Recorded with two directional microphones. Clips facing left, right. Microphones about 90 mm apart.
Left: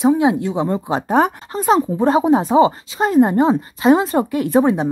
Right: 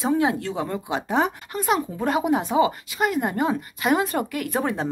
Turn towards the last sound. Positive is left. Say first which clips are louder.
# left 10 dB
turn(degrees=20)  # may be behind; listen again after turning